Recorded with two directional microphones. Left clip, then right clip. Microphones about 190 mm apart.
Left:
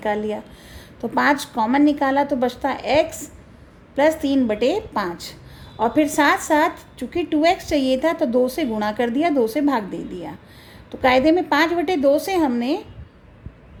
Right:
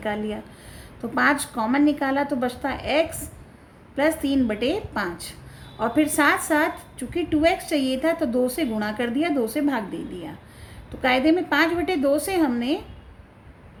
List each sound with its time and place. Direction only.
0.0 s a woman's voice: 25° left (ahead or behind)